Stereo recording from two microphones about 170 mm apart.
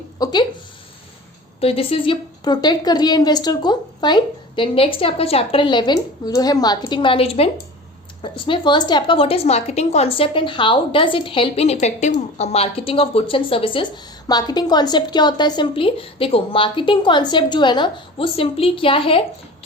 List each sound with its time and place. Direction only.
0.2 s speech: 25° left (ahead or behind)
1.6 s a woman's voice: 35° left (ahead or behind)